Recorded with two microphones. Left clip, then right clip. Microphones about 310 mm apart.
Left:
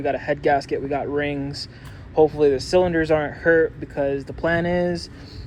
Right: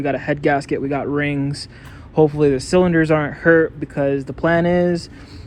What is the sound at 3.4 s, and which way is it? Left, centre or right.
Speech, right.